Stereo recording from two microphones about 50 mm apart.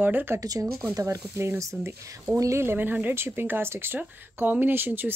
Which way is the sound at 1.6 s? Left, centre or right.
Right.